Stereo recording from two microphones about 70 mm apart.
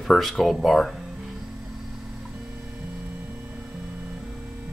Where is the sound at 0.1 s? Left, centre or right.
Centre.